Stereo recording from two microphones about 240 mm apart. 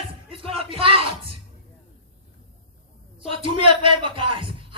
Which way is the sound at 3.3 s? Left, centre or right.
Right.